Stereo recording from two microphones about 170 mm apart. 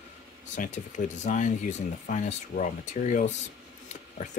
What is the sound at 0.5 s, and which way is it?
Speech, 45° left (ahead or behind).